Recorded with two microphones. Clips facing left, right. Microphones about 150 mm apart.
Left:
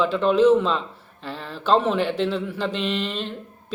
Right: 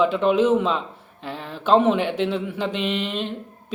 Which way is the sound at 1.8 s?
15° right (ahead or behind).